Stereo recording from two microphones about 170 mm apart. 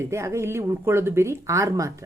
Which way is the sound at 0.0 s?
15° right (ahead or behind).